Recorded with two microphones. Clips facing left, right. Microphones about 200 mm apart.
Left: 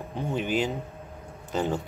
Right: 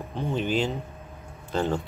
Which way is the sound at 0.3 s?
10° left (ahead or behind).